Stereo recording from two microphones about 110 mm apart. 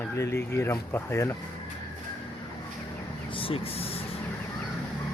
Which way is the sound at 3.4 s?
60° left (ahead or behind).